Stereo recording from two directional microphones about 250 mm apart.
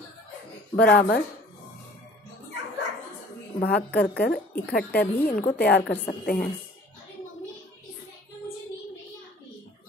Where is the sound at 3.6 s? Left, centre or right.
Left.